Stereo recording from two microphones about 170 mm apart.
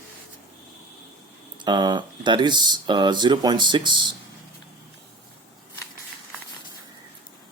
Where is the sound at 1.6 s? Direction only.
25° right (ahead or behind).